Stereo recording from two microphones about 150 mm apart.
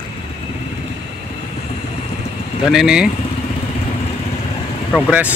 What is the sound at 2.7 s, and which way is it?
Speech, 5° right (ahead or behind).